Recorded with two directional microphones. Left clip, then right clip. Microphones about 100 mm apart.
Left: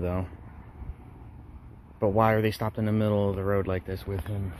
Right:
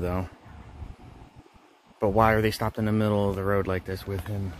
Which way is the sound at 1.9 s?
30° right (ahead or behind).